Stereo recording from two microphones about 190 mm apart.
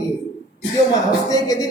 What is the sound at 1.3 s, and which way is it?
Speech, 20° left (ahead or behind).